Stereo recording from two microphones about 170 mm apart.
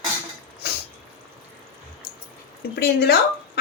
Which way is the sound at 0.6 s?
70° left (ahead or behind).